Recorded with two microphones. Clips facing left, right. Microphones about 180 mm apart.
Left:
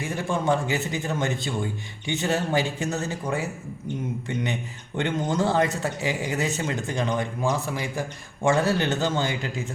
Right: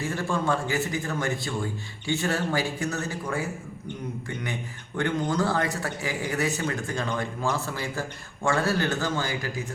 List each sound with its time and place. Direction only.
0.0 s speech: 20° left (ahead or behind)
4.9 s speech: 25° left (ahead or behind)